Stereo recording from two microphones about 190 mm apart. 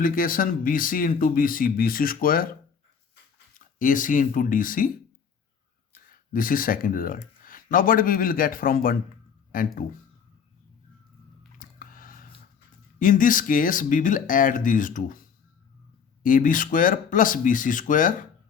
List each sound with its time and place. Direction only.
0.0 s speech: 45° left (ahead or behind)
3.8 s speech: 45° left (ahead or behind)
6.1 s speech: 45° left (ahead or behind)
11.6 s a sound: 45° left (ahead or behind)
13.0 s speech: 45° left (ahead or behind)